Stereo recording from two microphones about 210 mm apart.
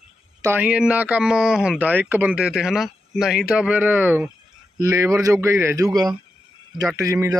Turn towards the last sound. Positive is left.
turn(degrees=-15)  # may be behind; listen again after turning